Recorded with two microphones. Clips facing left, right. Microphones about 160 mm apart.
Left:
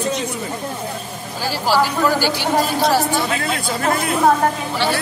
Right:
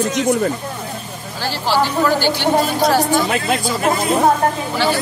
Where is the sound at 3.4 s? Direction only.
60° left (ahead or behind).